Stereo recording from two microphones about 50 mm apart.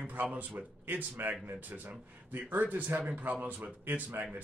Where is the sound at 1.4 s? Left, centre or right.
Right.